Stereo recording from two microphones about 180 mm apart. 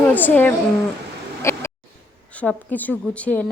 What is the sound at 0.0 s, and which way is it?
Speech, 10° left (ahead or behind).